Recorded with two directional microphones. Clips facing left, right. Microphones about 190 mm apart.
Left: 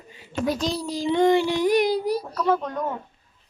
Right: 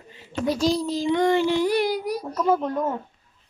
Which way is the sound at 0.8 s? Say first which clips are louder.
Left 1 dB; 10° left (ahead or behind).